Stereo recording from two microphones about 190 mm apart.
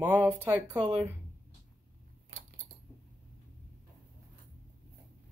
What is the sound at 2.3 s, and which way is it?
Coin, 90° right.